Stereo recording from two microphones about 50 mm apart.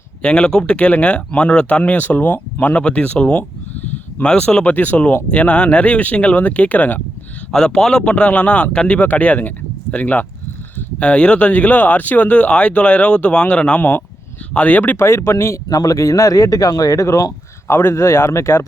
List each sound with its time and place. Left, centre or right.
0.2 s speech: left
1.8 s speech: left
4.7 s speech: left
5.3 s speech: left
7.5 s a man's voice: centre
8.1 s speech: left
11.0 s speech: left
14.9 s speech: left
17.7 s speech: left
17.9 s speech: left